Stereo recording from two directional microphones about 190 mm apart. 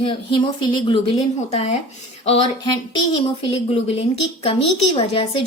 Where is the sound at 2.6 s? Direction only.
20° left (ahead or behind).